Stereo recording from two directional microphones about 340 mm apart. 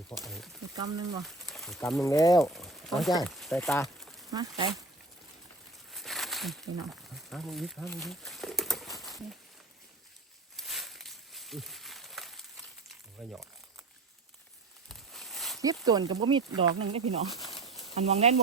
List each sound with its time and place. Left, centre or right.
0.1 s speech: centre
0.8 s speech: centre
1.2 s speech: centre
2.6 s a sound: centre
3.2 s speech: centre
4.3 s speech: centre
5.9 s a sound: centre
6.9 s crumpling: centre
10.6 s a sound: centre
13.2 s speech: centre
14.8 s a sound: centre
15.6 s speech: centre